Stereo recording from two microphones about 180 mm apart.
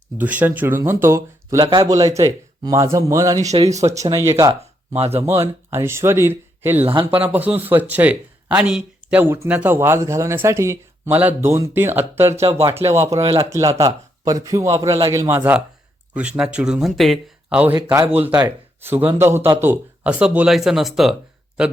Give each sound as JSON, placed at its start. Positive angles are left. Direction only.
{"t": 0.2, "sound": "speech", "side_deg": -10}
{"t": 3.5, "sound": "speech", "side_deg": -35}
{"t": 3.8, "sound": "speech", "side_deg": -15}
{"t": 4.9, "sound": "speech", "side_deg": -35}
{"t": 5.2, "sound": "speech", "side_deg": -15}
{"t": 6.8, "sound": "a man's voice", "side_deg": -30}
{"t": 7.2, "sound": "speech", "side_deg": -10}
{"t": 12.4, "sound": "speech", "side_deg": -35}
{"t": 12.6, "sound": "speech", "side_deg": -15}
{"t": 13.2, "sound": "speech", "side_deg": -30}
{"t": 13.5, "sound": "a man's voice", "side_deg": -15}
{"t": 16.1, "sound": "speech", "side_deg": -5}